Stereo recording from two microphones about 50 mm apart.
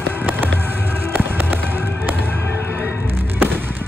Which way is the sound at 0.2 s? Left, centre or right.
Right.